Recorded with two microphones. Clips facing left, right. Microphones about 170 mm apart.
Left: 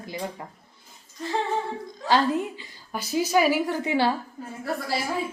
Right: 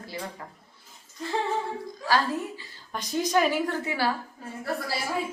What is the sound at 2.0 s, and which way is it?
Speech, 20° left (ahead or behind).